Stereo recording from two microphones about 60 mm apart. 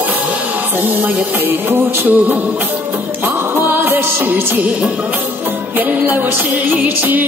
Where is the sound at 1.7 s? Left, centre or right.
Right.